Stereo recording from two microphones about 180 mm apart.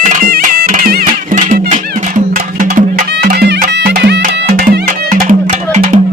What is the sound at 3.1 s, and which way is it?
Music, 65° right (ahead or behind).